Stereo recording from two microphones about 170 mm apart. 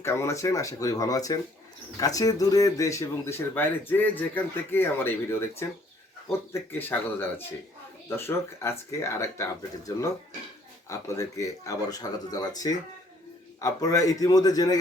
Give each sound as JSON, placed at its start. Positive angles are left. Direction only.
{"t": 0.0, "sound": "speech", "side_deg": 15}